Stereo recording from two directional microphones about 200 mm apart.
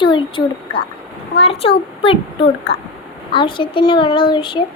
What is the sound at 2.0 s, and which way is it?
A child's voice, 25° left (ahead or behind).